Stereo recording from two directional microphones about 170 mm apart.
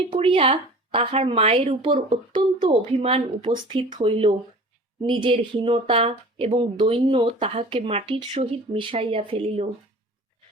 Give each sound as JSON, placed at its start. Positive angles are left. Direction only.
{"t": 0.1, "sound": "speech", "side_deg": -30}